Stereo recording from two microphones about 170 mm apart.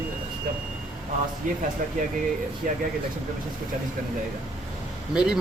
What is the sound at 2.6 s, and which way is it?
Speech, 50° right (ahead or behind).